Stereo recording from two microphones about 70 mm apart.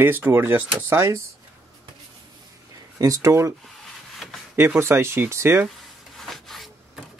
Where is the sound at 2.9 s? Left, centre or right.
Right.